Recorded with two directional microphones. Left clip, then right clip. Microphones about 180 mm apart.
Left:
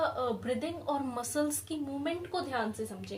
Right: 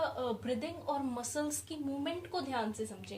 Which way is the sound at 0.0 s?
25° left (ahead or behind).